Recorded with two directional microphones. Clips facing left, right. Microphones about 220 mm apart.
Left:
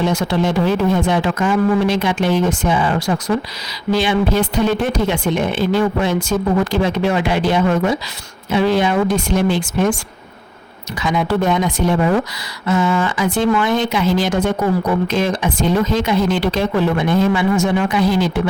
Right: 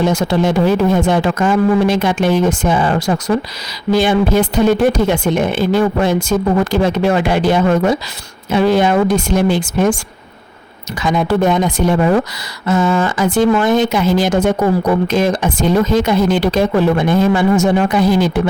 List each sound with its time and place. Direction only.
0.0 s speech: 45° right (ahead or behind)
11.0 s speech: 45° right (ahead or behind)